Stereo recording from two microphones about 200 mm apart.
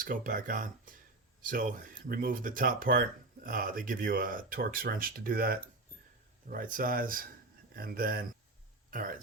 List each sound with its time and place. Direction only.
0.0 s speech: 45° right (ahead or behind)